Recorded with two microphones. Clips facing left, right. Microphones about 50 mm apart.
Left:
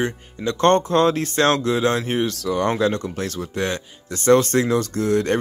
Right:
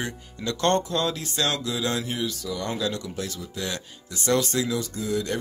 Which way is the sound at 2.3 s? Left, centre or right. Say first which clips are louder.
Left 9 dB; left.